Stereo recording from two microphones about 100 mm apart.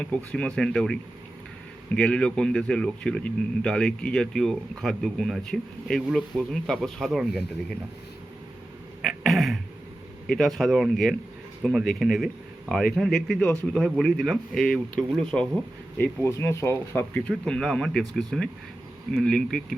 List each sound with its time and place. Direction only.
0.0 s speech: 10° left (ahead or behind)
2.0 s speech: 10° left (ahead or behind)
9.0 s throat clearing: centre (ahead or behind)
10.2 s speech: 5° left (ahead or behind)
16.0 s speech: 25° left (ahead or behind)
17.2 s speech: 5° left (ahead or behind)